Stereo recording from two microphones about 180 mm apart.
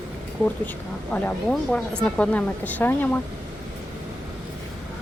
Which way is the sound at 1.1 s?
5° left (ahead or behind).